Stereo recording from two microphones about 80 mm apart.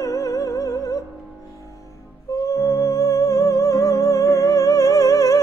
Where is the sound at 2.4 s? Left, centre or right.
Left.